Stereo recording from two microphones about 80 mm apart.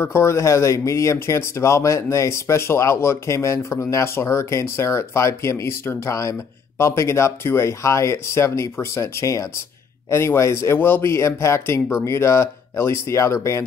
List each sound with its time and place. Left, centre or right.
0.0 s speech: left